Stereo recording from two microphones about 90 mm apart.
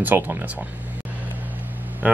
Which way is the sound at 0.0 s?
20° right (ahead or behind).